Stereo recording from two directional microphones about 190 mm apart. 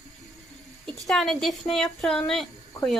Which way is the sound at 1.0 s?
Centre (ahead or behind).